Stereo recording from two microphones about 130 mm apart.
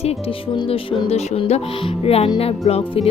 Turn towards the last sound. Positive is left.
turn(degrees=50)  # may be behind; listen again after turning